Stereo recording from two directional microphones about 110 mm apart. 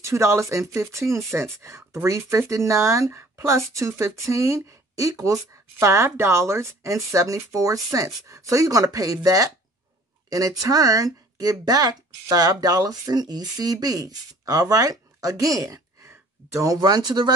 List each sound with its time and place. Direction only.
0.0 s speech: 25° right (ahead or behind)